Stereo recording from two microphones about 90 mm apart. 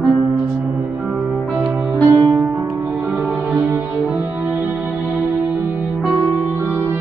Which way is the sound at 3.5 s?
20° right (ahead or behind).